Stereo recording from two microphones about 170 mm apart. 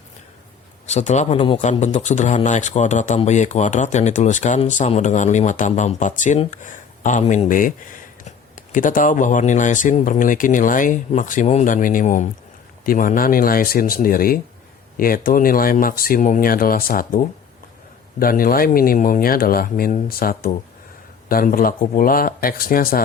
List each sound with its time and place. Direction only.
0.9 s speech: 45° left (ahead or behind); by 23.0 s 60° left (ahead or behind)